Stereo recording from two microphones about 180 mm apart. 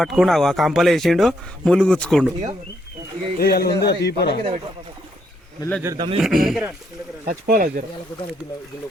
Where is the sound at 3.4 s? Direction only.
60° left (ahead or behind).